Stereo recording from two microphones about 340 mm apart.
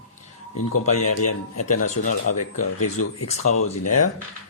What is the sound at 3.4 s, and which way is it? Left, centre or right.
Speech, left.